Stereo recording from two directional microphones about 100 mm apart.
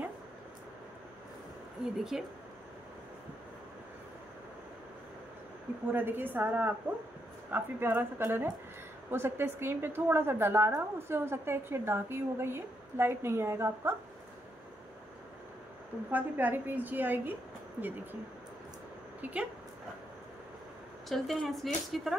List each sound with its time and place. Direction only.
2.1 s speech: 5° right (ahead or behind)
5.9 s a woman's voice: 20° right (ahead or behind)
16.1 s a woman's voice: 20° right (ahead or behind)
19.2 s a woman's voice: 15° right (ahead or behind)
21.1 s speech: centre (ahead or behind)